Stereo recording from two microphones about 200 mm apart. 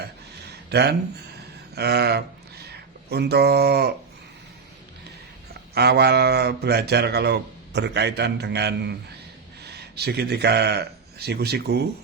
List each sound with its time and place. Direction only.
0.5 s a sound: 55° right (ahead or behind)
1.7 s speech: 55° right (ahead or behind)
5.7 s speech: 55° right (ahead or behind)